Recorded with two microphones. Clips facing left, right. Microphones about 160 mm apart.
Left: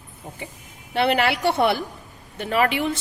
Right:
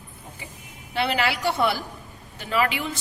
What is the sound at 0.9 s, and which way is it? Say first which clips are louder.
A woman's voice: left 4 dB; 55° left (ahead or behind).